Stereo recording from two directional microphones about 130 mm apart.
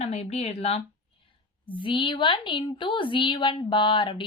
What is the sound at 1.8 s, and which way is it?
A woman's voice, 40° left (ahead or behind).